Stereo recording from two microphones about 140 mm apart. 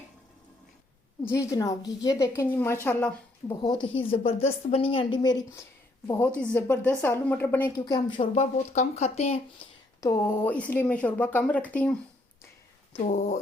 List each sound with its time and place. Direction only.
1.2 s a woman's voice: 20° left (ahead or behind)
3.6 s a woman's voice: 35° left (ahead or behind)
6.4 s a woman's voice: 10° left (ahead or behind)
7.8 s a woman's voice: 30° left (ahead or behind)
8.2 s speech: 55° left (ahead or behind)
10.0 s a woman's voice: 20° left (ahead or behind)
13.1 s speech: 65° left (ahead or behind)